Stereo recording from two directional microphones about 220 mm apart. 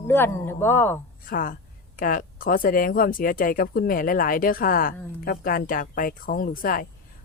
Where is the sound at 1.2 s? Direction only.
40° left (ahead or behind).